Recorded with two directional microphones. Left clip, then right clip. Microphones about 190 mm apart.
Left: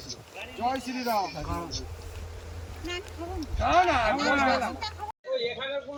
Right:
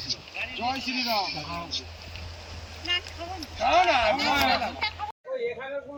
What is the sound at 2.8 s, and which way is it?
Speech, 5° left (ahead or behind).